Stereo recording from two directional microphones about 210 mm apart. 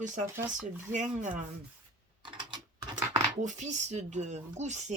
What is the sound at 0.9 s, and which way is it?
Speech, 35° right (ahead or behind).